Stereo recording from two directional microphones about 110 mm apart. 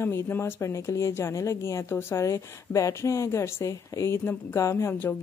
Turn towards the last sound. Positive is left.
turn(degrees=20)  # may be behind; listen again after turning